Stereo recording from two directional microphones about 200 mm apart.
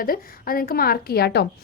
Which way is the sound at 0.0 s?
45° left (ahead or behind).